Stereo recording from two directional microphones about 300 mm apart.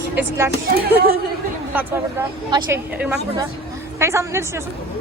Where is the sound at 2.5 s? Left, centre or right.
Centre.